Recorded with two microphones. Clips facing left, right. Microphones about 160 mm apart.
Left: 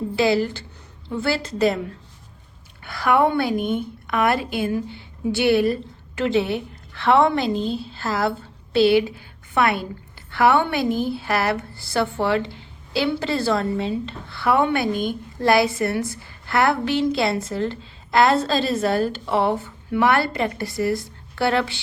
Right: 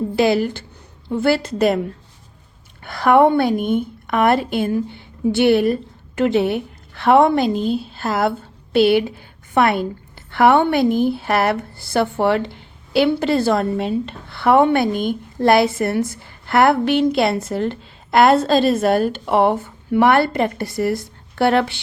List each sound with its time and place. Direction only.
1.1 s a woman's voice: 50° right (ahead or behind)
2.8 s a woman's voice: 50° right (ahead or behind)
7.5 s a woman's voice: 10° right (ahead or behind)
7.9 s a woman's voice: 50° right (ahead or behind)